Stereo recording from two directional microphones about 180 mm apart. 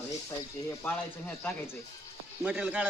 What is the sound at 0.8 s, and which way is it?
Speech, 10° left (ahead or behind).